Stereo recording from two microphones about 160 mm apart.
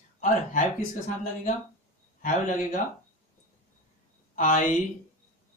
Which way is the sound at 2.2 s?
55° left (ahead or behind).